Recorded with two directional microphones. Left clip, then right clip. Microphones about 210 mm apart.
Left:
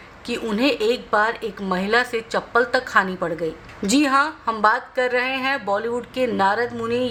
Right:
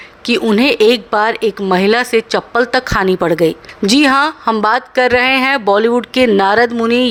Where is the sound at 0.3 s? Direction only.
40° right (ahead or behind).